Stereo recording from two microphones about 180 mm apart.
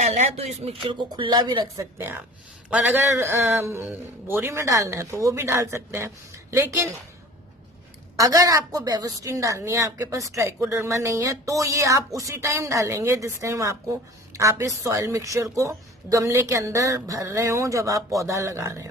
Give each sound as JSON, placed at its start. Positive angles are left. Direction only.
{"t": 0.0, "sound": "a woman's voice", "side_deg": -40}
{"t": 8.2, "sound": "a woman's voice", "side_deg": -20}